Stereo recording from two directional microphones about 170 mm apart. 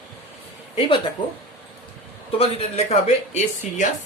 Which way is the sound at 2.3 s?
40° left (ahead or behind).